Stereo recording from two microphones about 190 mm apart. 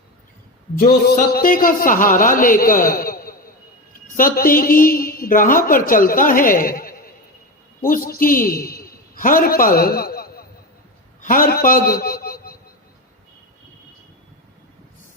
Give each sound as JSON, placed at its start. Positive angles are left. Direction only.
{"t": 0.8, "sound": "a woman's voice", "side_deg": 50}